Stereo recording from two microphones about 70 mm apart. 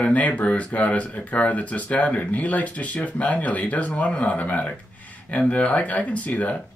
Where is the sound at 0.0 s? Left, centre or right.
Left.